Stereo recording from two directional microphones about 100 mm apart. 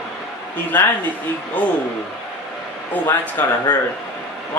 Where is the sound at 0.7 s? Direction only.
20° left (ahead or behind).